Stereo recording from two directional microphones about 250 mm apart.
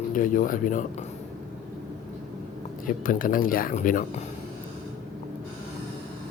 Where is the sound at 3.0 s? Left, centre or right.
Left.